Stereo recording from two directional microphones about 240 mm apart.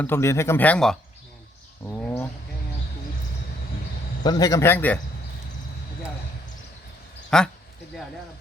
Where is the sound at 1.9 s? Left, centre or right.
Centre.